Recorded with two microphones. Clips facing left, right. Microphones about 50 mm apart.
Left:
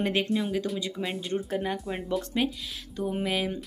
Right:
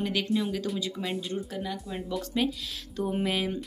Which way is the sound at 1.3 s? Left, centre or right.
Left.